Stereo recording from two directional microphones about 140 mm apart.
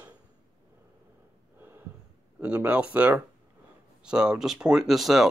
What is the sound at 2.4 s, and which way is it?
Speech, 10° right (ahead or behind).